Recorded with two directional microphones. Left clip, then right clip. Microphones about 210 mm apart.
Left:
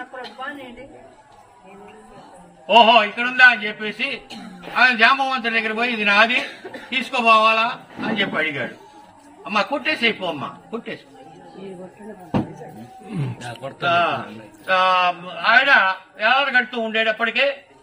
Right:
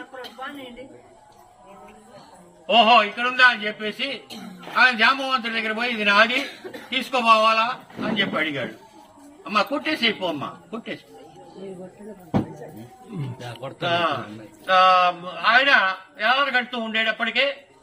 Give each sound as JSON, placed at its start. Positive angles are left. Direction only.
{"t": 2.6, "sound": "a man's voice", "side_deg": -20}
{"t": 13.4, "sound": "speech", "side_deg": -20}